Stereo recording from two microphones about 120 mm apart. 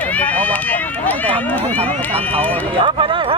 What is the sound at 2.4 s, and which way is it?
Speech, 15° left (ahead or behind).